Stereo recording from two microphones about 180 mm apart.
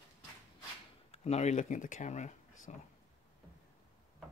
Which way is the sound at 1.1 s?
35° left (ahead or behind).